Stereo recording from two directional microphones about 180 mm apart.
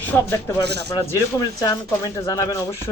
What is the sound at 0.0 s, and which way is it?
Speech, 15° left (ahead or behind).